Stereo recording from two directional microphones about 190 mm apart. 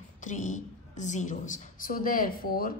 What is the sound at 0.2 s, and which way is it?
A woman's voice, 40° left (ahead or behind).